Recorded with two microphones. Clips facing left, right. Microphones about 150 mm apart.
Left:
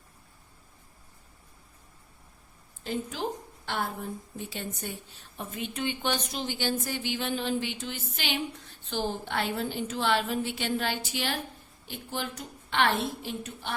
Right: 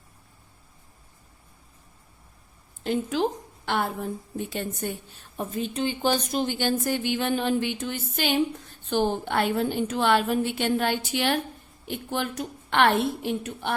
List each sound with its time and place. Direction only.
2.8 s a woman's voice: 75° right (ahead or behind)
3.7 s a woman's voice: 65° right (ahead or behind)
4.4 s a woman's voice: 55° right (ahead or behind)
5.4 s speech: 35° right (ahead or behind)
6.3 s speech: 50° right (ahead or behind)
8.9 s a woman's voice: 60° right (ahead or behind)